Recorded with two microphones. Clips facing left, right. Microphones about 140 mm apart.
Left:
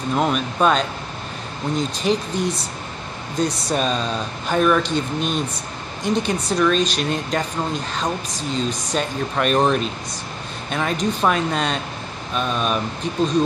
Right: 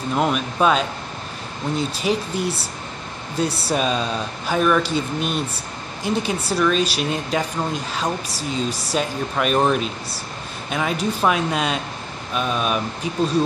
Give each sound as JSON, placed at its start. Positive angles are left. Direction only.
{"t": 0.1, "sound": "speech", "side_deg": 0}